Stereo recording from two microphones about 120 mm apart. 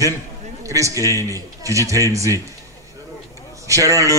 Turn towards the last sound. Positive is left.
turn(degrees=-25)  # may be behind; listen again after turning